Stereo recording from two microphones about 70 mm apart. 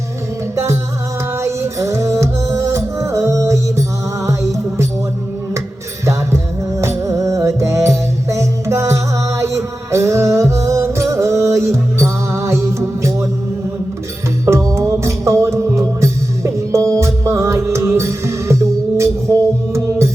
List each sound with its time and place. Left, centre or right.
0.5 s music: right
6.1 s music: right
14.4 s music: right